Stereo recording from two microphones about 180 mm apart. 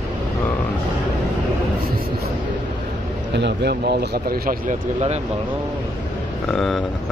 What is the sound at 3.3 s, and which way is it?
Speech, 75° right (ahead or behind).